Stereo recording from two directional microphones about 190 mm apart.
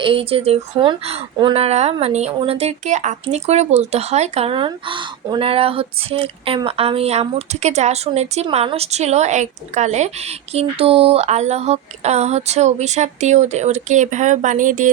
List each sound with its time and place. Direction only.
0.0 s speech: 30° right (ahead or behind)